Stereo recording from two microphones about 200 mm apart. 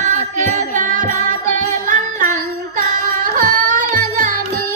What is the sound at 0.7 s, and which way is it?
Music, 40° right (ahead or behind).